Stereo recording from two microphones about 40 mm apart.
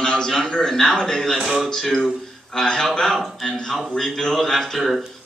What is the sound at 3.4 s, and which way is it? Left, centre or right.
Speech, centre.